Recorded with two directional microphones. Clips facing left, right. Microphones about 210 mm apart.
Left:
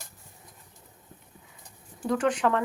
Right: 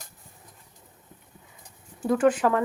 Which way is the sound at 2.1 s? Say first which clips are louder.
Right 4 dB; 5° right (ahead or behind).